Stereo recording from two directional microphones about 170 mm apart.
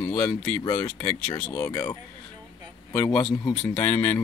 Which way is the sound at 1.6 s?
20° left (ahead or behind).